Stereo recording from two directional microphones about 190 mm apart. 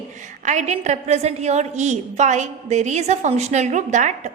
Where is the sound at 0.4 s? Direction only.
40° right (ahead or behind).